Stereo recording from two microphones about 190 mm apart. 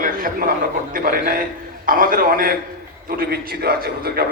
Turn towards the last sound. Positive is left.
turn(degrees=-55)  # may be behind; listen again after turning